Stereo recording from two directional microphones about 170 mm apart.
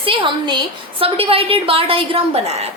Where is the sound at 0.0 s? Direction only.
30° right (ahead or behind).